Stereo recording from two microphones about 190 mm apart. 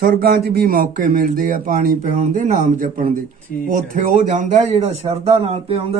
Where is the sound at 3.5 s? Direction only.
55° left (ahead or behind).